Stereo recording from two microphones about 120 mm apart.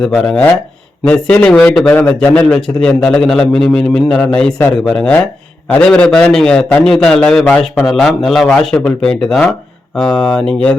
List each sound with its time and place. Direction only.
1.0 s a man's voice: 10° left (ahead or behind)
1.9 s a man's voice: 15° left (ahead or behind)